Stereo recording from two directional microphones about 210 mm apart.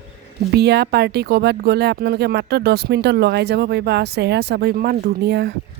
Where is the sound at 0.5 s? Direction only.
50° right (ahead or behind).